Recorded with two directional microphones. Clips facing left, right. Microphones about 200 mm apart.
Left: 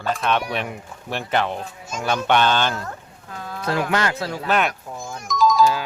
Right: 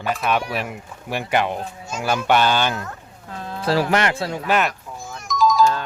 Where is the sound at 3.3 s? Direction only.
30° right (ahead or behind).